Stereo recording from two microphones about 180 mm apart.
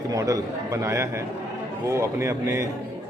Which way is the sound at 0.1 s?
20° right (ahead or behind).